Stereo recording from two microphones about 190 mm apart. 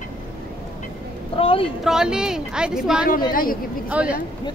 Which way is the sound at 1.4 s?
30° left (ahead or behind).